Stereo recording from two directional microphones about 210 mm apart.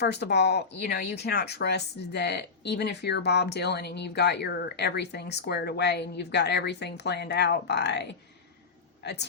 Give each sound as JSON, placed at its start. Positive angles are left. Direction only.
{"t": 0.0, "sound": "speech", "side_deg": 50}